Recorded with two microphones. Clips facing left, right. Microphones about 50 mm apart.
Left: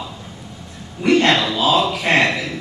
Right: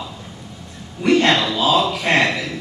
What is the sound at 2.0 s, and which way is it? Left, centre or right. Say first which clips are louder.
Speech: left 1 dB; left.